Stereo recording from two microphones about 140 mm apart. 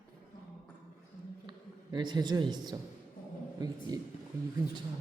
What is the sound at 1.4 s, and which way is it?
A woman's voice, 35° right (ahead or behind).